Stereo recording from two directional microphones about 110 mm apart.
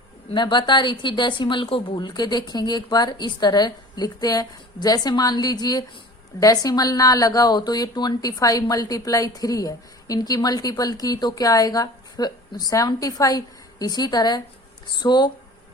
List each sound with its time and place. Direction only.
0.3 s speech: 45° left (ahead or behind)